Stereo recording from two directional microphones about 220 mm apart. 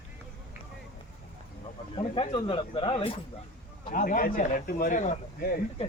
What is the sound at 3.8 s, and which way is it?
A man's voice, 35° left (ahead or behind).